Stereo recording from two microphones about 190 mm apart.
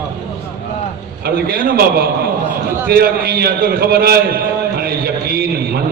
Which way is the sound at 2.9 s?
55° right (ahead or behind).